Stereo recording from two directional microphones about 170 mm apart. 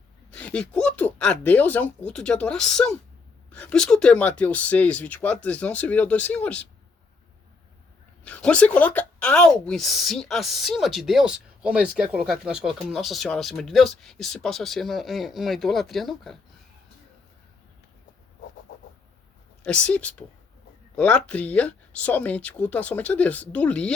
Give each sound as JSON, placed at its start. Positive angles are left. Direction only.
{"t": 0.3, "sound": "speech", "side_deg": 5}
{"t": 8.2, "sound": "speech", "side_deg": 5}
{"t": 19.6, "sound": "speech", "side_deg": 5}